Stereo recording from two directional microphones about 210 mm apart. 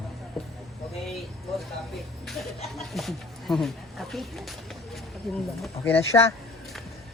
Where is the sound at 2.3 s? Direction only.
Centre (ahead or behind).